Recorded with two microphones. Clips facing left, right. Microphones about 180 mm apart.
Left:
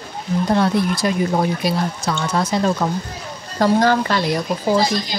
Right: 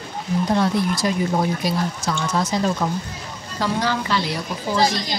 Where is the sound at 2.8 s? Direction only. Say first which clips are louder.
Left 2 dB; 40° left (ahead or behind).